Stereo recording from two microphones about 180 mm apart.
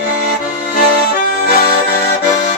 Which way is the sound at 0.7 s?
55° left (ahead or behind).